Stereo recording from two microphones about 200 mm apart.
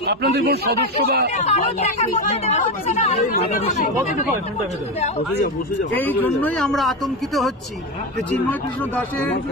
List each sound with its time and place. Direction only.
0.0 s a man's voice: 55° right (ahead or behind)
1.3 s speech: 35° left (ahead or behind)
5.9 s speech: 10° left (ahead or behind)